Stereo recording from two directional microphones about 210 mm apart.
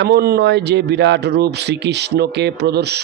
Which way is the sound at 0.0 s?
50° right (ahead or behind).